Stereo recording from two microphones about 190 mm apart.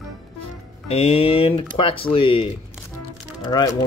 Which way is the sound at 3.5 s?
20° left (ahead or behind).